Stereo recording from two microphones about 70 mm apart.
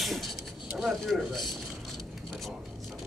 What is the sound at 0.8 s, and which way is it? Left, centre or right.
Speech, centre.